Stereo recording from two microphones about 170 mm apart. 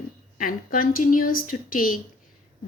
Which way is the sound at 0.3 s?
55° left (ahead or behind).